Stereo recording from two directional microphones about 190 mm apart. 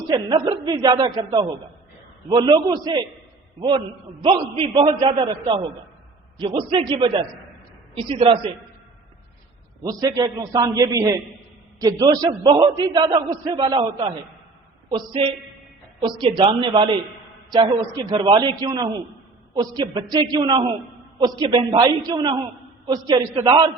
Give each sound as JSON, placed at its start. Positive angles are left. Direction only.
{"t": 0.1, "sound": "a man's voice", "side_deg": -20}
{"t": 10.0, "sound": "a man's voice", "side_deg": -20}